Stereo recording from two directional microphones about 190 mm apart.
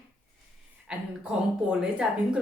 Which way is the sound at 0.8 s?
5° right (ahead or behind).